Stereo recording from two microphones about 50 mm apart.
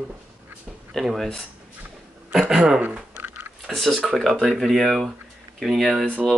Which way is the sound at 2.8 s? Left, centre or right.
Right.